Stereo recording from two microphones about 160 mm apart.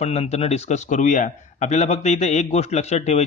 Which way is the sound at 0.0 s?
40° left (ahead or behind).